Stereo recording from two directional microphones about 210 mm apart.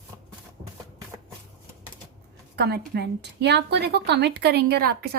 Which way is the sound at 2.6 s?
50° right (ahead or behind).